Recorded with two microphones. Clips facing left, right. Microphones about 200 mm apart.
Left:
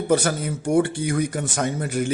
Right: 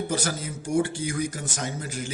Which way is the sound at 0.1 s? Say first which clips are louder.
Left 8 dB; 60° left (ahead or behind).